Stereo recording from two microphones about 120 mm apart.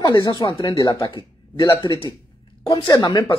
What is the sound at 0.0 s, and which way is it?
A man's voice, 35° left (ahead or behind).